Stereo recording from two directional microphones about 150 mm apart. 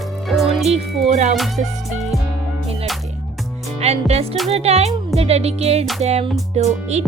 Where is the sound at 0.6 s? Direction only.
45° right (ahead or behind).